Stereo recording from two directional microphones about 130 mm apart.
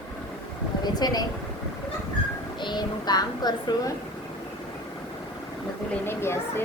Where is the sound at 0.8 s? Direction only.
30° left (ahead or behind).